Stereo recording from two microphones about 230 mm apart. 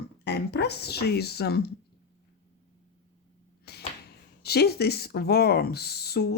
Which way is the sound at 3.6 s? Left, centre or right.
Left.